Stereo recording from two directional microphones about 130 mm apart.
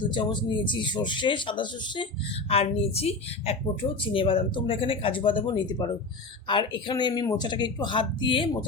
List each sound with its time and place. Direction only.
0.0 s speech: 35° left (ahead or behind)
2.5 s a woman's voice: 50° left (ahead or behind)